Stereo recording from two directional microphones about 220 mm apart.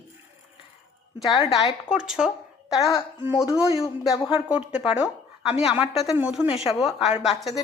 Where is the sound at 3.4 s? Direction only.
5° right (ahead or behind).